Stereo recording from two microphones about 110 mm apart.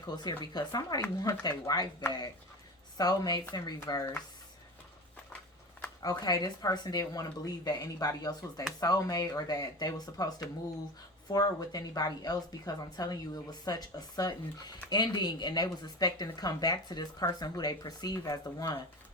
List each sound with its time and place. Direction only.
0.2 s speech: 40° left (ahead or behind)
6.0 s speech: 35° left (ahead or behind)